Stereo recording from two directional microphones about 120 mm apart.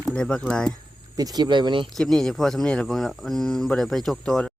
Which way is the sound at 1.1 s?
30° right (ahead or behind).